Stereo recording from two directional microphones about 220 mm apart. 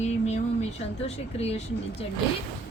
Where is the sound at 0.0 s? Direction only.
30° left (ahead or behind).